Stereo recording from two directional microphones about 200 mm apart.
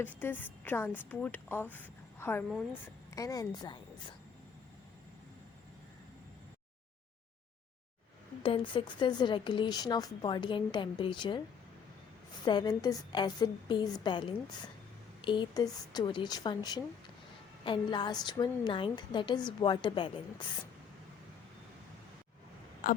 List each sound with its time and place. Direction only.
0.0 s a woman's voice: 10° left (ahead or behind)
8.4 s speech: 25° left (ahead or behind)
12.5 s speech: 20° left (ahead or behind)
22.8 s a sound: 45° left (ahead or behind)